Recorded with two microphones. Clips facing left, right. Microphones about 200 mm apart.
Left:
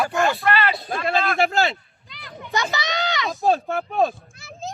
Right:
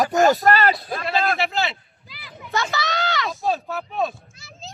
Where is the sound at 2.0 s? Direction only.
5° right (ahead or behind).